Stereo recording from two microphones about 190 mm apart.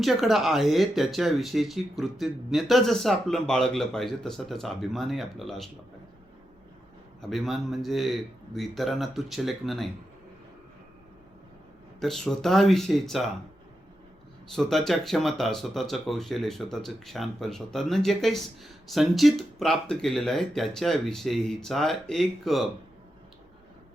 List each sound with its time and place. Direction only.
0.0 s speech: centre (ahead or behind)
7.2 s speech: centre (ahead or behind)
11.9 s speech: centre (ahead or behind)
14.5 s speech: centre (ahead or behind)